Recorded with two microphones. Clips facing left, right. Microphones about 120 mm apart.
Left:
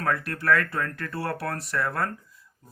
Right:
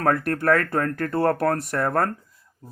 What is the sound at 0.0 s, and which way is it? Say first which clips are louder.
Speech: right 6 dB; 45° right (ahead or behind).